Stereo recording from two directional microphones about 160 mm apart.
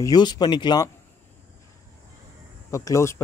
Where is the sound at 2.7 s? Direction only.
20° left (ahead or behind).